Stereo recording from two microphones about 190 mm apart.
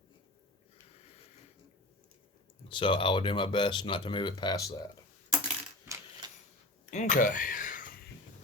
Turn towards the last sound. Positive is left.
turn(degrees=45)  # may be behind; listen again after turning